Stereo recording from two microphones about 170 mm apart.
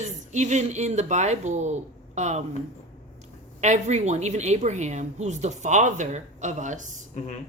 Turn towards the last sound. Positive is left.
turn(degrees=45)  # may be behind; listen again after turning